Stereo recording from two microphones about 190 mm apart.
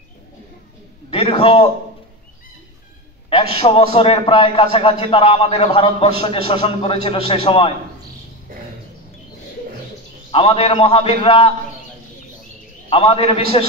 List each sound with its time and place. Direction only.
1.1 s a man's voice: 30° left (ahead or behind)
3.5 s a man's voice: 30° left (ahead or behind)
10.3 s a man's voice: 30° left (ahead or behind)
12.9 s a man's voice: 30° left (ahead or behind)